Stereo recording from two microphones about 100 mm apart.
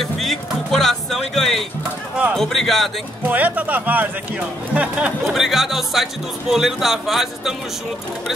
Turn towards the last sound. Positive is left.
turn(degrees=0)  # may be behind; listen again after turning